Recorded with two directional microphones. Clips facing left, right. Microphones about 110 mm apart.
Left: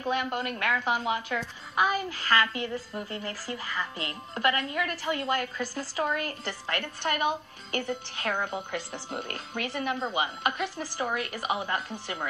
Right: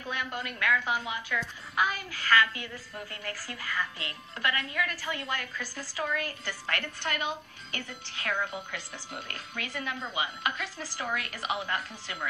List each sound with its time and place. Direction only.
0.0 s speech: 35° left (ahead or behind)
1.8 s speech: 25° left (ahead or behind)
9.7 s a woman's voice: 25° left (ahead or behind)
10.6 s a woman's voice: 20° left (ahead or behind)